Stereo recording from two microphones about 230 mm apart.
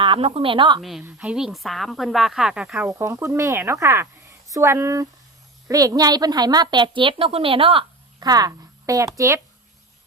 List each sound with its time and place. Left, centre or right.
0.0 s a woman's voice: right
0.8 s a woman's voice: centre